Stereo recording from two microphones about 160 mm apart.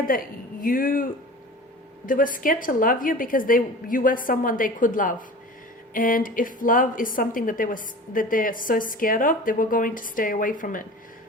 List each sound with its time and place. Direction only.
0.1 s a woman's voice: 60° left (ahead or behind)